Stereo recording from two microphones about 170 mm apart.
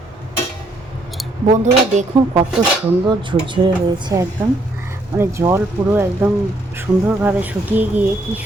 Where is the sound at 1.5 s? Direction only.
40° right (ahead or behind).